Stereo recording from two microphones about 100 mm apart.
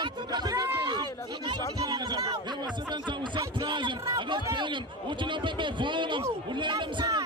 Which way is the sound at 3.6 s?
50° right (ahead or behind).